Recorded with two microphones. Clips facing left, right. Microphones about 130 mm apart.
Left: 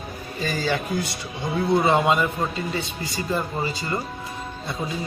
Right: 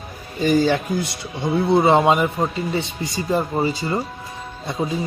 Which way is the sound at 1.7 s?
25° right (ahead or behind).